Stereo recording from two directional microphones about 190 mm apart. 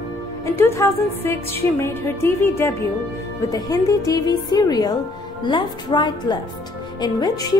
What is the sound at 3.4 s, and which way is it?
Music, 20° left (ahead or behind).